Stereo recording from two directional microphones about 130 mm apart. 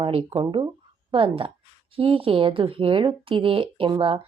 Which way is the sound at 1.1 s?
45° right (ahead or behind).